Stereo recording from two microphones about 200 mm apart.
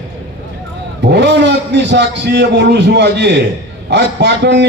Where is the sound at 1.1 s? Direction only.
60° right (ahead or behind).